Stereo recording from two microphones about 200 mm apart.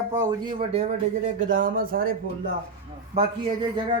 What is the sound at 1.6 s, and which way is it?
Speech, 45° right (ahead or behind).